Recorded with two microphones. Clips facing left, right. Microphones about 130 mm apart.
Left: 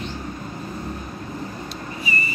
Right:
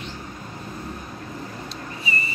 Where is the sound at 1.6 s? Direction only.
25° right (ahead or behind).